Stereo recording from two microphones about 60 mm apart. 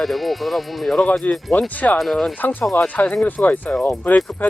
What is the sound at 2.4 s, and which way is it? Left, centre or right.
Speech, left.